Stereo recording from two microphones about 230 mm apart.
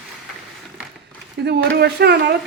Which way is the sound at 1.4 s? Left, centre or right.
Right.